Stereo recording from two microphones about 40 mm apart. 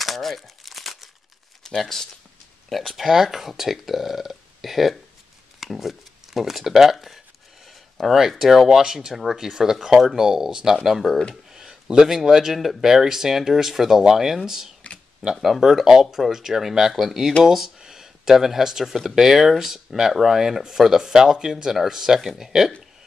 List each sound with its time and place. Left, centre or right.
0.0 s crumpling: centre
1.8 s speech: centre
3.0 s speech: centre
11.5 s a sound: centre
12.1 s speech: centre